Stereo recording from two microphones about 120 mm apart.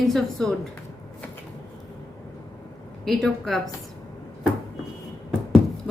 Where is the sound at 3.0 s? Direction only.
Centre (ahead or behind).